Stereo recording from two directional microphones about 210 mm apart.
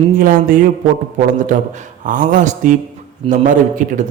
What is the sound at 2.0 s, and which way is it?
Speech, 40° right (ahead or behind).